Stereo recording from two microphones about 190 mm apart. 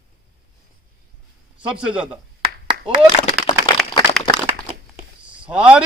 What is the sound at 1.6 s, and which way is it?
Speech, 5° right (ahead or behind).